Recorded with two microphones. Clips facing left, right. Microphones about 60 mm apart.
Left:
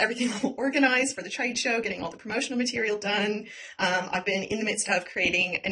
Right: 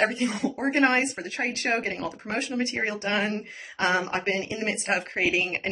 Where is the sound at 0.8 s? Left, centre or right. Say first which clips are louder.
Right 2 dB; right.